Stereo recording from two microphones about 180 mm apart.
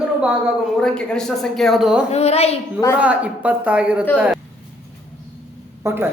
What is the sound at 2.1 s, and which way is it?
Speech, 35° left (ahead or behind).